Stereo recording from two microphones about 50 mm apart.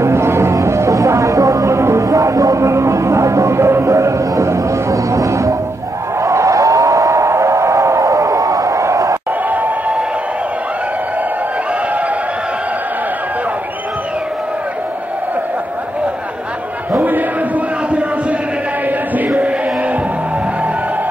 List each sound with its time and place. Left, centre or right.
0.0 s music: right
6.2 s a sound: right
18.9 s music: right